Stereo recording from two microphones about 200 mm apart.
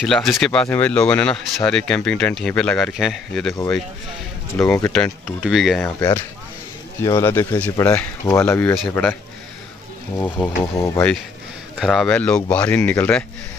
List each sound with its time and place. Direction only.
0.0 s speech: centre (ahead or behind)
4.9 s speech: centre (ahead or behind)
5.9 s speech: 10° left (ahead or behind)
10.1 s speech: 10° left (ahead or behind)
11.8 s speech: centre (ahead or behind)